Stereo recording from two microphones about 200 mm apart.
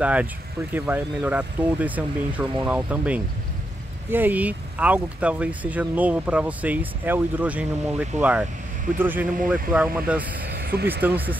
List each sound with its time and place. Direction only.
0.0 s speech: 5° right (ahead or behind)
10.4 s vehicle: 50° right (ahead or behind)
10.9 s speech: 10° right (ahead or behind)